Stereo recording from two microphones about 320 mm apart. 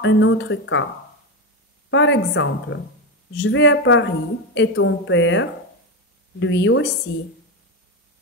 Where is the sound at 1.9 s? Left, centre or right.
Left.